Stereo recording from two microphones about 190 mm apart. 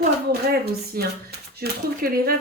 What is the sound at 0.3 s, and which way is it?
A woman's voice, 55° right (ahead or behind).